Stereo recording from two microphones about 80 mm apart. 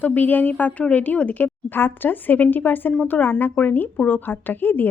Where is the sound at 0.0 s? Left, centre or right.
Left.